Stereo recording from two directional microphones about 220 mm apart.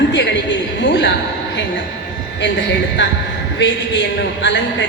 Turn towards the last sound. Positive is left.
turn(degrees=55)  # may be behind; listen again after turning